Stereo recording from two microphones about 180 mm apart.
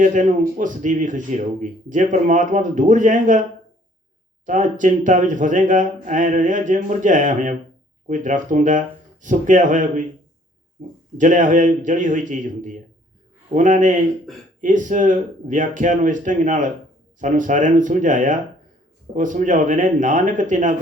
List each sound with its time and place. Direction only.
0.0 s speech: 45° right (ahead or behind)
4.4 s speech: 45° right (ahead or behind)
11.2 s speech: 45° right (ahead or behind)